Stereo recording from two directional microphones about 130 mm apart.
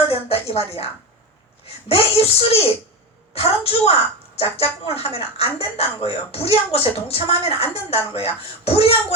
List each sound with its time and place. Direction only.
0.1 s a child's voice: 50° left (ahead or behind)